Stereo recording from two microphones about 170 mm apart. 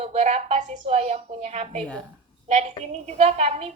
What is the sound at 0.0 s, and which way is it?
A woman's voice, 40° right (ahead or behind).